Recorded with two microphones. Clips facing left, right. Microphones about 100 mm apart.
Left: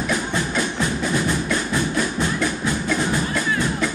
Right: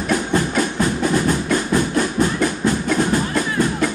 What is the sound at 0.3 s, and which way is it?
Music, 45° right (ahead or behind).